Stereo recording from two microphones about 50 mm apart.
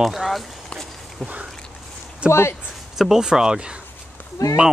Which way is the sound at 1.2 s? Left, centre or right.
Right.